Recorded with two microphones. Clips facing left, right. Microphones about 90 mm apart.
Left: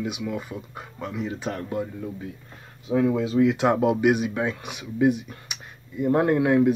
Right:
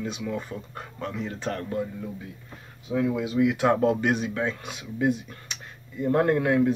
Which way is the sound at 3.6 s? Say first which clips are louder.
Left 1 dB; 15° left (ahead or behind).